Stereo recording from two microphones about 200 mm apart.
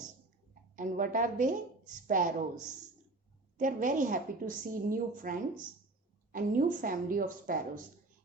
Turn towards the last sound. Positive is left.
turn(degrees=-45)  # may be behind; listen again after turning